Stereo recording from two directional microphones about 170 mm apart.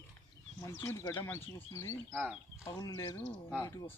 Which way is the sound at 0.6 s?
15° left (ahead or behind).